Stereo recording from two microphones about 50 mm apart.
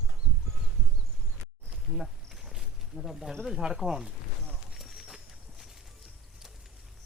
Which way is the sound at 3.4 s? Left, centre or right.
Centre.